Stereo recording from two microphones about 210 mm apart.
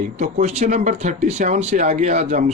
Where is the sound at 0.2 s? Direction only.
35° right (ahead or behind).